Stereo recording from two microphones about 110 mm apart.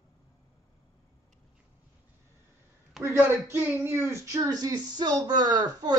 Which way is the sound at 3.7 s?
25° right (ahead or behind).